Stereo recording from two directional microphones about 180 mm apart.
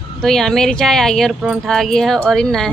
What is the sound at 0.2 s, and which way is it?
Speech, 5° left (ahead or behind).